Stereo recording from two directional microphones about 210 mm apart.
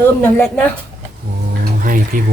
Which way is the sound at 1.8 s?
40° right (ahead or behind).